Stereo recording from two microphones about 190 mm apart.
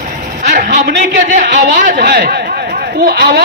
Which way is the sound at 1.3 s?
45° right (ahead or behind).